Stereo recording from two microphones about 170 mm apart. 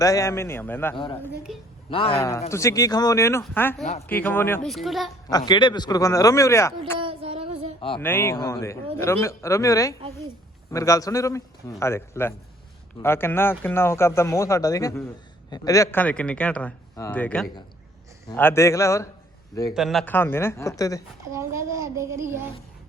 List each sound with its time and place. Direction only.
0.0 s a man's voice: 20° left (ahead or behind)
1.9 s a man's voice: 35° left (ahead or behind)
2.1 s a man's voice: 15° left (ahead or behind)
4.6 s a child's voice: centre (ahead or behind)
5.5 s speech: 25° left (ahead or behind)
7.0 s a sound: 30° right (ahead or behind)
7.8 s speech: 30° left (ahead or behind)
8.0 s a man's voice: 15° left (ahead or behind)
19.7 s a man's voice: centre (ahead or behind); by 21.0 s 20° left (ahead or behind)
21.3 s a child's voice: 15° right (ahead or behind)